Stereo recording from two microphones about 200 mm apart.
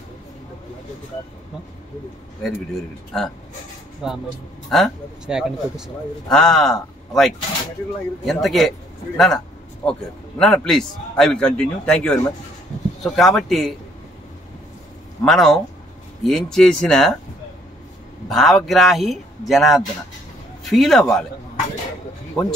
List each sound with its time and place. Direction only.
2.4 s a man's voice: centre (ahead or behind)
15.2 s a man's voice: centre (ahead or behind)
18.3 s a man's voice: centre (ahead or behind)
22.4 s speech: 20° left (ahead or behind)